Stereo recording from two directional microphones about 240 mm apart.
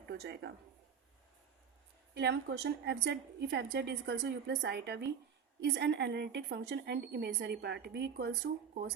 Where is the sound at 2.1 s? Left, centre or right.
Right.